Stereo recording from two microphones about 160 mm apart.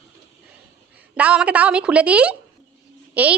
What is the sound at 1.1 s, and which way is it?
A woman's voice, 5° right (ahead or behind).